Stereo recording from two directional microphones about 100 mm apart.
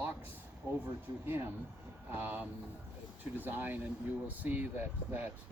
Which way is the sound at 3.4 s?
20° right (ahead or behind).